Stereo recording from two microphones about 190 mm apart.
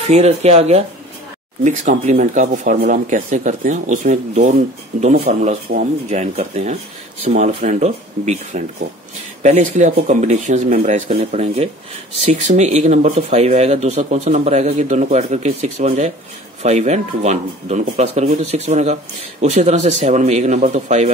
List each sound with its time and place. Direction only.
0.0 s speech: 35° right (ahead or behind)
5.2 s speech: 35° right (ahead or behind)